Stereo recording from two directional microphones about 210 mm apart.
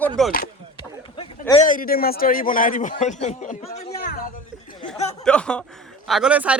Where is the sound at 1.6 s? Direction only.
40° left (ahead or behind).